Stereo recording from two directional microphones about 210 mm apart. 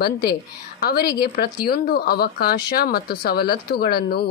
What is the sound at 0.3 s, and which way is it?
A woman's voice, 45° left (ahead or behind).